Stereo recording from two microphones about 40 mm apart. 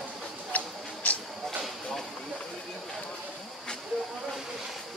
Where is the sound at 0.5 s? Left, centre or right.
Left.